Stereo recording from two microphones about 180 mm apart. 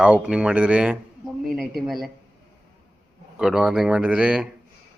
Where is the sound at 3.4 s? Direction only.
5° right (ahead or behind).